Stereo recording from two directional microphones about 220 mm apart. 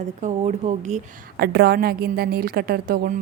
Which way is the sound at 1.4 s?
50° right (ahead or behind).